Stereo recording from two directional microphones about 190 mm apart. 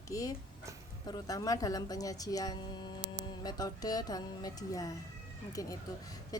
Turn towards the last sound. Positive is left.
turn(degrees=20)  # may be behind; listen again after turning